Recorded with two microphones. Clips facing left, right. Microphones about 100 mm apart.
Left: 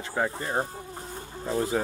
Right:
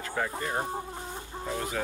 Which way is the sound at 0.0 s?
25° left (ahead or behind).